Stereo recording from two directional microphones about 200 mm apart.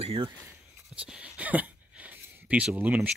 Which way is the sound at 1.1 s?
5° right (ahead or behind).